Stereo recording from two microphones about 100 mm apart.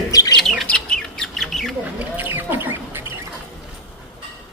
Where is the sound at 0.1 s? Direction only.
35° left (ahead or behind).